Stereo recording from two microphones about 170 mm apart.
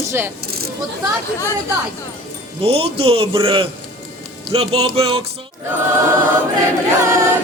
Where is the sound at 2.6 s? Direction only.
35° right (ahead or behind).